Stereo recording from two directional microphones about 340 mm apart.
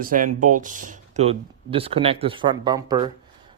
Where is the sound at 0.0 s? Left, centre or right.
Right.